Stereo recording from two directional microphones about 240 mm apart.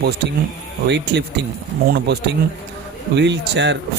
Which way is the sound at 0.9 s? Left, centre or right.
Right.